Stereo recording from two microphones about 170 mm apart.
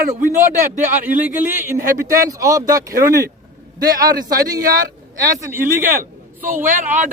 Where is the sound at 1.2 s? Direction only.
10° right (ahead or behind).